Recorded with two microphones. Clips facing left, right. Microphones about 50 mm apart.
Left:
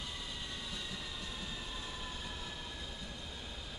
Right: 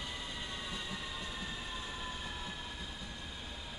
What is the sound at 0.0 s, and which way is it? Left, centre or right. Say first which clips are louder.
Train: right 2 dB; right.